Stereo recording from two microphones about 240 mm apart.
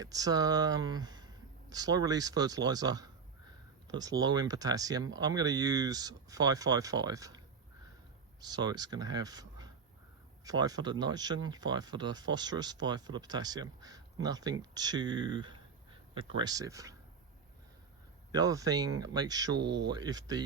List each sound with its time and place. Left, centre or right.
0.0 s speech: centre
18.3 s speech: centre